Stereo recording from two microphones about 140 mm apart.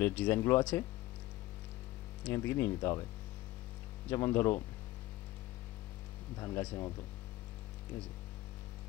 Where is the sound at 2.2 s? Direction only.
15° left (ahead or behind).